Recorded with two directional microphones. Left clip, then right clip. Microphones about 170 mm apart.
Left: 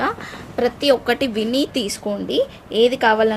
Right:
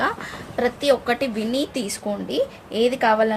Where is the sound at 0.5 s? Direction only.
25° left (ahead or behind).